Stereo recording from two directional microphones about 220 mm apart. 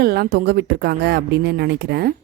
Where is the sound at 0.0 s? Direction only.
45° right (ahead or behind).